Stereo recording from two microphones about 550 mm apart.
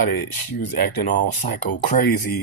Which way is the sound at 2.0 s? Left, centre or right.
Left.